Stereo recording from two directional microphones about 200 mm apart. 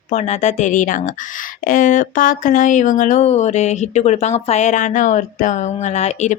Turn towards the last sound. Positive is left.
turn(degrees=35)  # may be behind; listen again after turning